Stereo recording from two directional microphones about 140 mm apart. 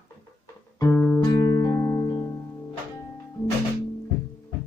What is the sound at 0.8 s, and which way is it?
Music, 15° left (ahead or behind).